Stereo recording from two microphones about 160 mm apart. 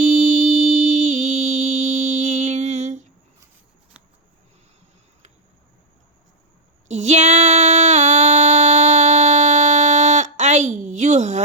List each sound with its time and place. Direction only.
0.0 s music: 45° right (ahead or behind)
6.8 s female singing: 45° right (ahead or behind)